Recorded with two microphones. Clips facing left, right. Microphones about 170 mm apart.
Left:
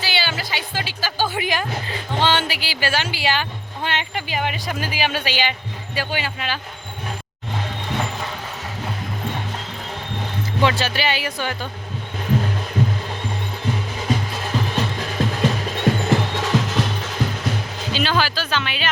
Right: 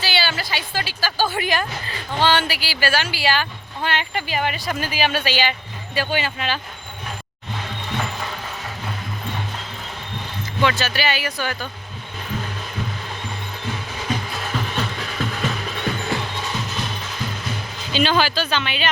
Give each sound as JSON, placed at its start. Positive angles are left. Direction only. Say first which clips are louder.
{"t": 0.0, "sound": "music", "louder": "right 1 dB", "side_deg": 15}
{"t": 2.1, "sound": "speech", "louder": "right 1 dB", "side_deg": 20}
{"t": 10.6, "sound": "speech", "louder": "even", "side_deg": 30}
{"t": 14.8, "sound": "music", "louder": "left 3 dB", "side_deg": 30}
{"t": 16.3, "sound": "music", "louder": "left 7 dB", "side_deg": 90}
{"t": 17.9, "sound": "speech", "louder": "right 3 dB", "side_deg": 0}